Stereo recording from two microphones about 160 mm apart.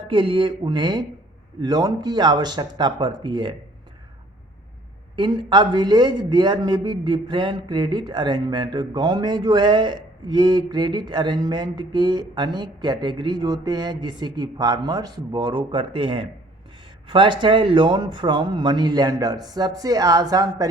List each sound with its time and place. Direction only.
0.1 s a man's voice: 30° right (ahead or behind)
5.1 s a man's voice: 30° right (ahead or behind)